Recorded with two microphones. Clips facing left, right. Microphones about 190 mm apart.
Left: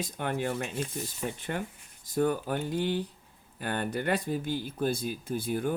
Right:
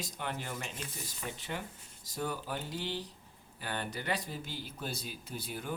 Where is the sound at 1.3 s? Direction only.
55° left (ahead or behind).